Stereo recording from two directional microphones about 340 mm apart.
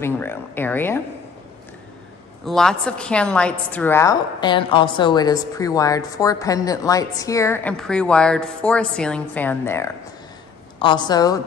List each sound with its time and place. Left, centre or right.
0.0 s a woman's voice: centre
2.4 s a woman's voice: centre